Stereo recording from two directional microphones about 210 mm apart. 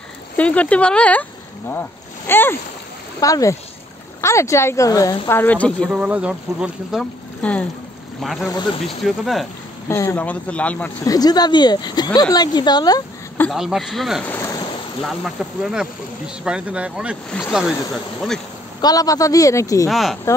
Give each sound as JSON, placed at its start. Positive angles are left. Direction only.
{"t": 0.4, "sound": "speech", "side_deg": 5}
{"t": 5.4, "sound": "speech", "side_deg": 5}
{"t": 5.9, "sound": "speech", "side_deg": -5}
{"t": 9.8, "sound": "speech", "side_deg": 15}
{"t": 11.1, "sound": "speech", "side_deg": 20}
{"t": 13.5, "sound": "speech", "side_deg": 0}
{"t": 18.8, "sound": "speech", "side_deg": 20}
{"t": 19.9, "sound": "speech", "side_deg": 0}